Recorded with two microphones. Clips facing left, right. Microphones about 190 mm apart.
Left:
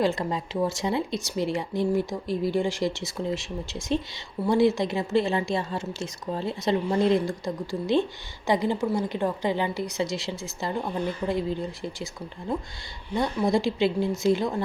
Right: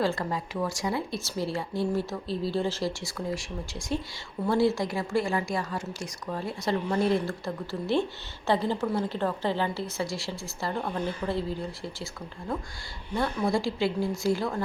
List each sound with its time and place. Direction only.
0.0 s a woman's voice: 20° left (ahead or behind)
13.1 s a woman's voice: 20° left (ahead or behind)